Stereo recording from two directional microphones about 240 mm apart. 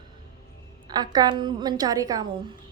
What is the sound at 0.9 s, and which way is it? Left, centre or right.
A woman's voice, centre.